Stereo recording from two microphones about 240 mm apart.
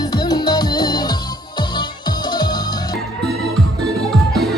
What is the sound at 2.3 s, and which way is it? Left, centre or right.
Music, centre.